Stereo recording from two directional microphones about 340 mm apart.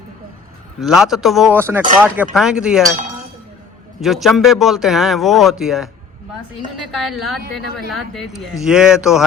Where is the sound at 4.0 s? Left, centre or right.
Centre.